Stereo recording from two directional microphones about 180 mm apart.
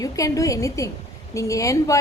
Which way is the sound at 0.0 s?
20° left (ahead or behind).